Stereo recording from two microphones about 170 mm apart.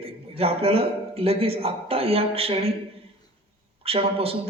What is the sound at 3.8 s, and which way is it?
Speech, 35° right (ahead or behind).